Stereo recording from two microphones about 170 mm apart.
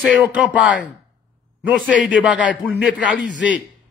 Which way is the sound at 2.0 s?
5° right (ahead or behind).